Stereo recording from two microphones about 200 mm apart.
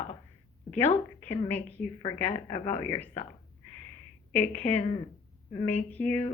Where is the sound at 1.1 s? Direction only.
10° left (ahead or behind).